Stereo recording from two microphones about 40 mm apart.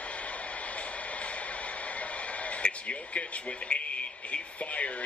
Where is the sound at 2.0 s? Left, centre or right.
Left.